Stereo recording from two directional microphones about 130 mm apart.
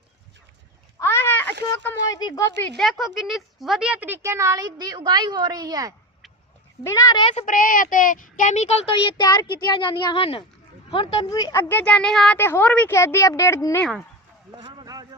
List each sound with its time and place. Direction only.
0.9 s a sound: 20° left (ahead or behind)
2.0 s speech: 30° left (ahead or behind)
2.6 s speech: centre (ahead or behind); by 5.9 s 30° right (ahead or behind)
6.8 s speech: 25° left (ahead or behind)
7.3 s speech: 90° left; by 11.3 s 45° left (ahead or behind)
11.3 s speech: 30° left (ahead or behind)
11.5 s speech: 15° left (ahead or behind)
12.4 s speech: 15° left (ahead or behind)
14.5 s a sound: 35° right (ahead or behind)